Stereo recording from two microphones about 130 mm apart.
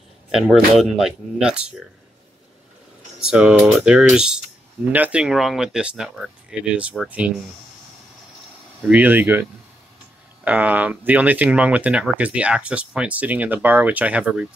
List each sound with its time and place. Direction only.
0.3 s speech: centre (ahead or behind)
3.2 s speech: 5° right (ahead or behind)
8.8 s speech: 10° right (ahead or behind)